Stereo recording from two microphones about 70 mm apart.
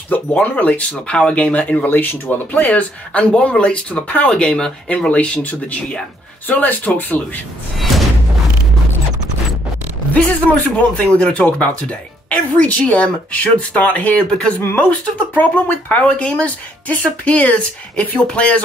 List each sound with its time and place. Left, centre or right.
0.1 s speech: left
2.6 s speech: centre
10.1 s speech: centre
14.6 s speech: left
14.9 s speech: left